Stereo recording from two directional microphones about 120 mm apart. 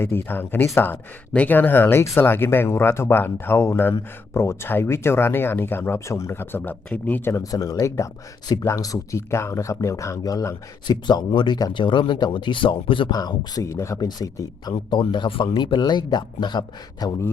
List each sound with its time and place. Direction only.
0.0 s speech: 20° left (ahead or behind); by 13.1 s 45° left (ahead or behind)
13.1 s speech: 35° left (ahead or behind)